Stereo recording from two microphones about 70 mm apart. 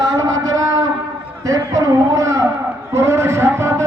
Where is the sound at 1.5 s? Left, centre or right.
Right.